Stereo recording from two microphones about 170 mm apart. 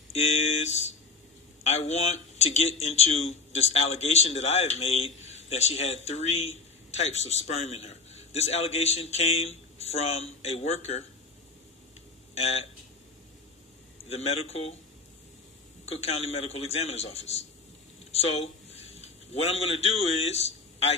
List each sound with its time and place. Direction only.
0.1 s a sound: 40° left (ahead or behind)
1.7 s a man's voice: 40° left (ahead or behind)
12.4 s a man's voice: 40° left (ahead or behind)
14.0 s a man's voice: 40° left (ahead or behind)
15.8 s a man's voice: 35° left (ahead or behind)